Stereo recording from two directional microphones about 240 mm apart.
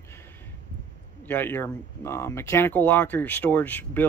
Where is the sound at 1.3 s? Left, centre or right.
Centre.